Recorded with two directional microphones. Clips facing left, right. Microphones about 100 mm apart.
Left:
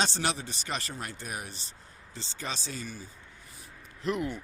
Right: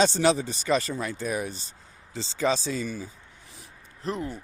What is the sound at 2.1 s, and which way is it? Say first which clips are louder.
Speech: right 12 dB; 90° right.